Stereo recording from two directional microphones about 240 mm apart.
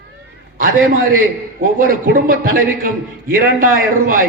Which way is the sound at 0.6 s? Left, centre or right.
Right.